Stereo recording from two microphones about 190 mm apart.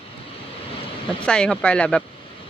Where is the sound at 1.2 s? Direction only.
5° left (ahead or behind).